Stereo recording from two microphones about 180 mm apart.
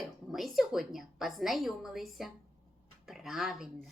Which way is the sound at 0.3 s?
Centre (ahead or behind).